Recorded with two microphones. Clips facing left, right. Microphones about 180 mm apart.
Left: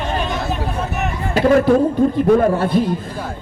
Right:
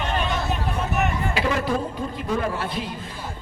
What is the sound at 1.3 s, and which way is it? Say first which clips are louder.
A man's voice: left 14 dB; 45° left (ahead or behind).